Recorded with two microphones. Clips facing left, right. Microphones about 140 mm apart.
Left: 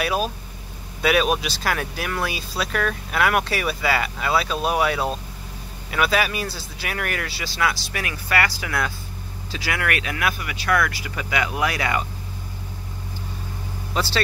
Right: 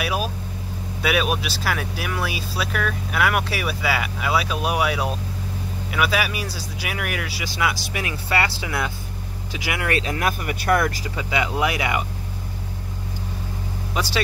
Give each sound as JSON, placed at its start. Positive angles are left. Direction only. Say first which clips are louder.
{"t": 0.0, "sound": "vehicle", "louder": "left 2 dB", "side_deg": -5}
{"t": 1.0, "sound": "speech", "louder": "left 2 dB", "side_deg": -5}
{"t": 11.1, "sound": "speech", "louder": "even", "side_deg": -20}